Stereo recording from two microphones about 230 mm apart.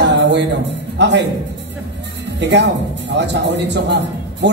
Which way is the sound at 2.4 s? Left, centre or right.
Right.